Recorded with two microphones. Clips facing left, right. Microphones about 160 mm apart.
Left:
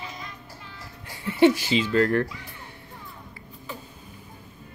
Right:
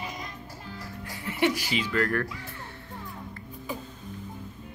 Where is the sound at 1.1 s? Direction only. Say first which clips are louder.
Left 8 dB; 30° left (ahead or behind).